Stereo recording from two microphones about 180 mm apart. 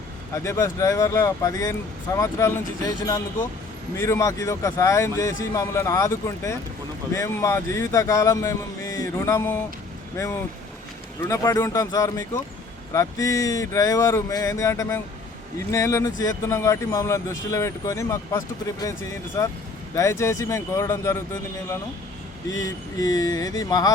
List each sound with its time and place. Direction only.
0.4 s speech: 15° left (ahead or behind)
11.2 s speech: 15° left (ahead or behind)
22.6 s speech: 20° left (ahead or behind)